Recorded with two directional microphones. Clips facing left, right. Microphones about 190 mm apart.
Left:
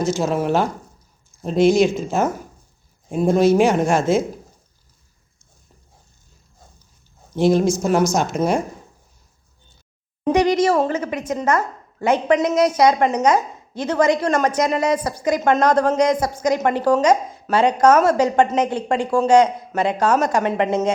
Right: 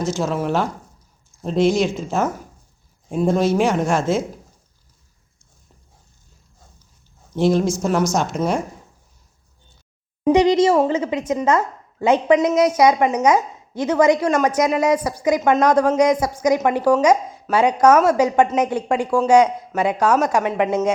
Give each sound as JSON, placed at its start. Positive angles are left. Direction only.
{"t": 0.0, "sound": "speech", "side_deg": 5}
{"t": 7.3, "sound": "speech", "side_deg": 5}
{"t": 10.3, "sound": "a woman's voice", "side_deg": -25}
{"t": 20.5, "sound": "speech", "side_deg": 0}